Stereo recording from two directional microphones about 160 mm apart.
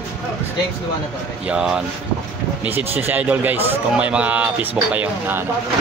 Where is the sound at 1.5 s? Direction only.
5° right (ahead or behind).